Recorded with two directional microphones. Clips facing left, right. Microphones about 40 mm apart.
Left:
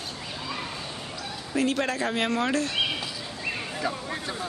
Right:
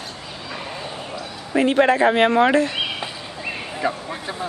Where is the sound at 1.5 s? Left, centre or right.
Right.